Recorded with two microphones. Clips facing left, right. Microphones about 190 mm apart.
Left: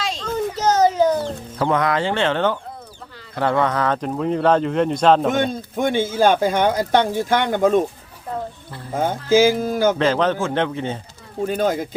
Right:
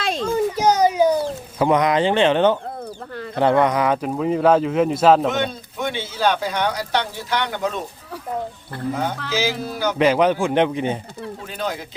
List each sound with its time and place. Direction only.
0.2 s chicken: 10° right (ahead or behind)
3.3 s speech: 20° right (ahead or behind)
5.3 s speech: 50° left (ahead or behind)
9.3 s speech: 50° left (ahead or behind)
10.0 s a man's voice: 10° right (ahead or behind)
11.4 s speech: 50° left (ahead or behind)